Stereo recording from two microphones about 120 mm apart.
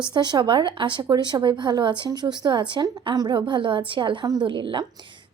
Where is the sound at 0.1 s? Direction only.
35° right (ahead or behind).